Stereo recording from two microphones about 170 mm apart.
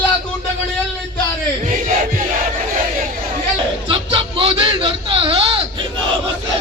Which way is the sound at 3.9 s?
30° right (ahead or behind).